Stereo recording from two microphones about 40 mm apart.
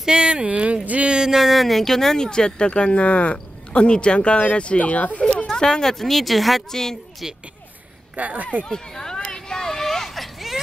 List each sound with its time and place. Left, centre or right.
0.0 s speech: right
0.5 s speech: right
0.8 s a sound: right
1.1 s speech: centre; by 5.2 s left
5.5 s speech: centre
6.7 s a woman's voice: centre
8.2 s speech: right
8.6 s a sound: centre